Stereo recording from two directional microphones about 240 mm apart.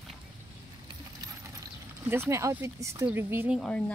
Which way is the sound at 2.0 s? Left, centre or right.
Centre.